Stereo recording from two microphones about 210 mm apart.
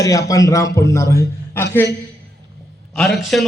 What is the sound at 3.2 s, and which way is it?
Speech, centre (ahead or behind).